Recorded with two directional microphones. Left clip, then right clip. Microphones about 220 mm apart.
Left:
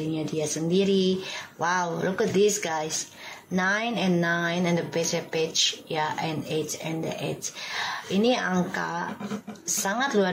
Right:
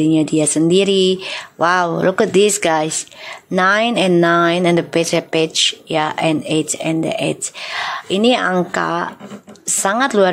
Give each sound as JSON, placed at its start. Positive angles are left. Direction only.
{"t": 0.1, "sound": "speech", "side_deg": -50}